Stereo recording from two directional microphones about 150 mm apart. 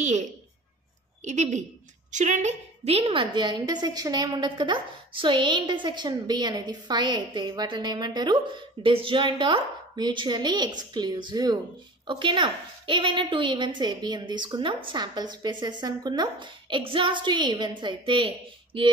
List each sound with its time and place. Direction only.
1.2 s a woman's voice: 50° right (ahead or behind); by 18.9 s 35° right (ahead or behind)